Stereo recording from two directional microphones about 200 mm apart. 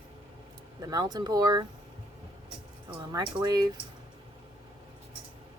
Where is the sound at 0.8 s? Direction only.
20° right (ahead or behind).